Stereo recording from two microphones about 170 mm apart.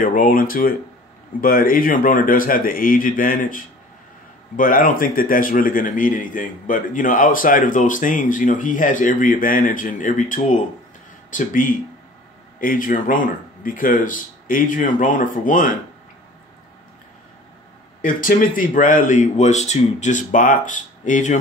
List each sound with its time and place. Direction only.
0.0 s speech: 55° left (ahead or behind)
18.0 s speech: 55° left (ahead or behind)